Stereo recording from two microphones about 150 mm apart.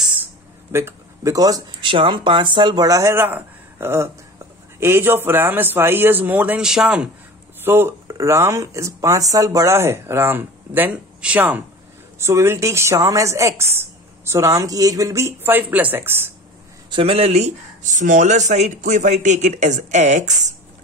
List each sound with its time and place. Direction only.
0.7 s a woman's voice: 15° right (ahead or behind)
16.9 s speech: 40° right (ahead or behind)